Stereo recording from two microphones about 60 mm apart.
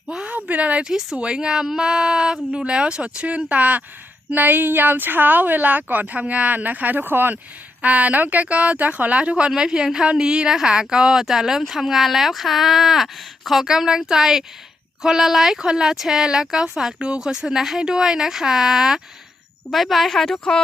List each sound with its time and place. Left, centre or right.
0.1 s a sound: centre
0.3 s a woman's voice: right
7.8 s speech: right; by 20.4 s centre